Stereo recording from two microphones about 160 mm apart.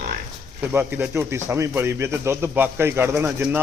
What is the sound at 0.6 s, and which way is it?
A man's voice, 10° right (ahead or behind).